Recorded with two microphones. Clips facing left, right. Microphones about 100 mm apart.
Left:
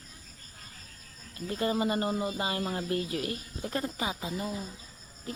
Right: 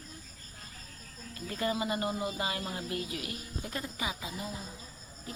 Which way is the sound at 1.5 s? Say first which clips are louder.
Left 4 dB; 30° left (ahead or behind).